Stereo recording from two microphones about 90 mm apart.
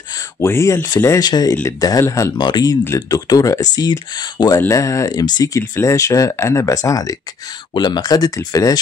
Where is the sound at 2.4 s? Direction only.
55° left (ahead or behind).